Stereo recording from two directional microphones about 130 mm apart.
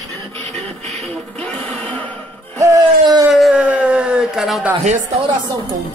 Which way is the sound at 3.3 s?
5° right (ahead or behind).